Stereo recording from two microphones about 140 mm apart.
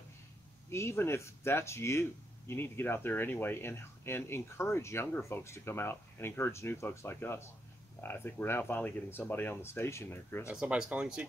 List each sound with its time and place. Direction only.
0.7 s speech: 20° left (ahead or behind)
10.5 s speech: 5° right (ahead or behind)